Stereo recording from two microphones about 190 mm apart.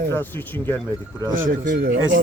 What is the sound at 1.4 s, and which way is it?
Speech, 45° right (ahead or behind).